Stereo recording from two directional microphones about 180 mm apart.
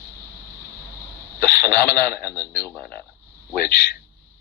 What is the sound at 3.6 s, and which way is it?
Speech, 55° left (ahead or behind).